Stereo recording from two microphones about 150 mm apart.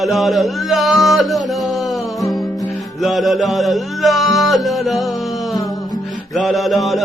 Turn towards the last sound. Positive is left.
turn(degrees=0)  # may be behind; listen again after turning